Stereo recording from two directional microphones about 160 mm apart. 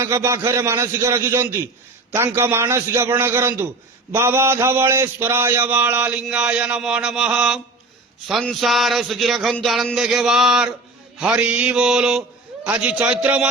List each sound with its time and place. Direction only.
0.0 s a man's voice: 15° right (ahead or behind)